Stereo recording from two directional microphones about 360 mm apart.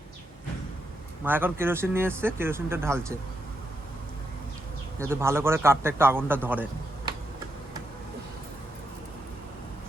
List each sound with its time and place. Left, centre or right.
1.2 s speech: centre
4.9 s speech: centre